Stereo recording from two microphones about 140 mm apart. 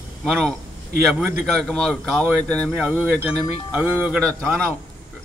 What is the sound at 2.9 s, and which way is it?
Speech, 15° right (ahead or behind).